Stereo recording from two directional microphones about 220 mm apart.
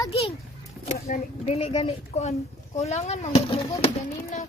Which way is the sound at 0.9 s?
35° left (ahead or behind).